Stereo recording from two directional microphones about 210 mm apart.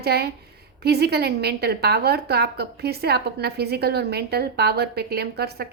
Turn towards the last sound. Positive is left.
turn(degrees=-50)  # may be behind; listen again after turning